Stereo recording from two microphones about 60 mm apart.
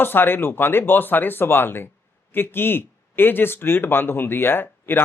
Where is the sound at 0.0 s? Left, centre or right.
Left.